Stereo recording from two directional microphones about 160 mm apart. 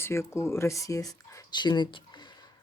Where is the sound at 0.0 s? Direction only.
15° left (ahead or behind).